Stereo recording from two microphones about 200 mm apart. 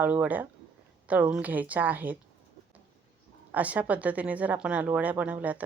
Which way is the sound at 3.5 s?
5° right (ahead or behind).